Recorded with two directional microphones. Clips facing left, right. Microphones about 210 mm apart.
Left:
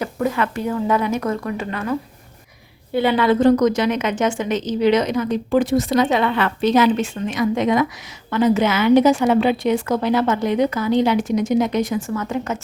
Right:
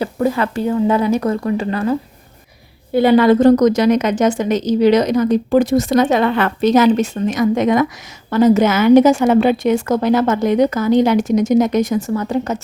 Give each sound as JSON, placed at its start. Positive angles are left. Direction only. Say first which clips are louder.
{"t": 0.0, "sound": "a woman's voice", "louder": "right 4 dB", "side_deg": -30}